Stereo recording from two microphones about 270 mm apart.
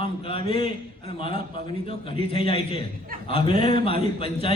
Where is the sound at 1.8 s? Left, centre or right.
Centre.